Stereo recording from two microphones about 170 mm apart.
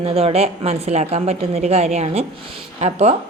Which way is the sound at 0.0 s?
35° right (ahead or behind).